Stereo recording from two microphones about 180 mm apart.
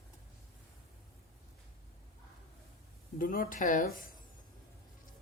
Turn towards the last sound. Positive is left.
turn(degrees=50)  # may be behind; listen again after turning